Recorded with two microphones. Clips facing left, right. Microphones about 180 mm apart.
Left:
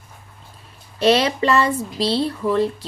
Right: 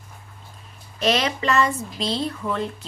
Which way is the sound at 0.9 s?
30° left (ahead or behind).